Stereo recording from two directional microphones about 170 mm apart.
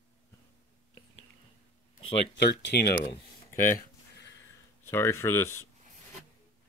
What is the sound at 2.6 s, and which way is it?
Speech, 70° left (ahead or behind).